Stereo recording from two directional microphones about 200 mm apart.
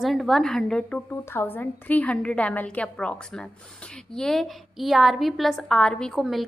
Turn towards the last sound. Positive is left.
turn(degrees=0)  # may be behind; listen again after turning